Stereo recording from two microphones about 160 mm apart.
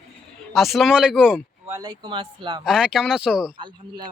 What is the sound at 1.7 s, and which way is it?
Speech, 25° right (ahead or behind).